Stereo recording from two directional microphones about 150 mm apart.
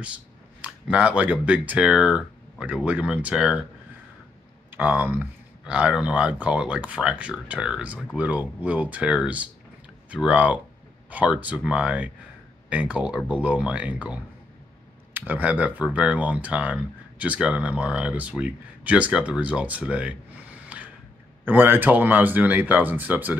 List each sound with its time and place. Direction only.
0.6 s speech: 10° right (ahead or behind)
4.7 s speech: 10° right (ahead or behind)
20.6 s a sound: 10° right (ahead or behind)
21.5 s speech: 15° right (ahead or behind)